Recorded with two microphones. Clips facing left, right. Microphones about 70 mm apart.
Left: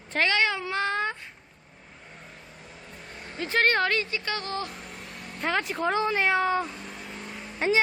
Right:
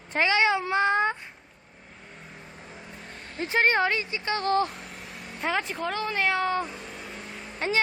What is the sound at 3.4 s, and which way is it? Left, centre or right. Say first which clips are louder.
Speech: right 1 dB; centre.